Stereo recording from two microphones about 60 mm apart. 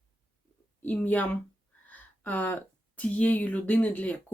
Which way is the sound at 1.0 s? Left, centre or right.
Left.